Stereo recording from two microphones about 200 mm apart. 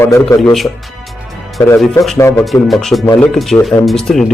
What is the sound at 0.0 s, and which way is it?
Speech, 10° left (ahead or behind).